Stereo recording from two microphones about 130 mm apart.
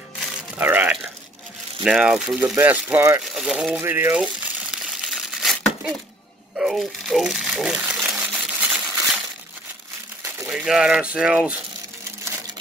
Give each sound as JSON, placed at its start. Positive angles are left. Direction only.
{"t": 0.6, "sound": "a sound", "side_deg": -15}
{"t": 1.8, "sound": "speech", "side_deg": -5}
{"t": 3.3, "sound": "crumpling", "side_deg": -5}
{"t": 6.6, "sound": "speech", "side_deg": 0}
{"t": 8.3, "sound": "a sound", "side_deg": -10}
{"t": 10.5, "sound": "speech", "side_deg": -5}